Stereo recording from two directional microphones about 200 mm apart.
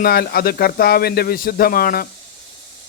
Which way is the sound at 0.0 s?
50° left (ahead or behind).